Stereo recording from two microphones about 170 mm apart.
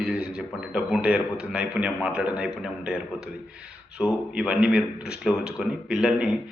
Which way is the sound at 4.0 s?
5° right (ahead or behind).